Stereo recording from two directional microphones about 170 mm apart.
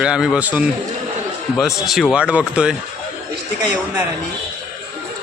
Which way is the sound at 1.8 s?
Centre (ahead or behind).